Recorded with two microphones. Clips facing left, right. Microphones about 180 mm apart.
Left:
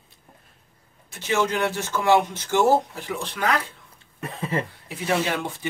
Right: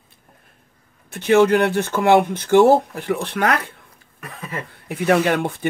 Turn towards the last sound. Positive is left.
turn(degrees=-55)  # may be behind; listen again after turning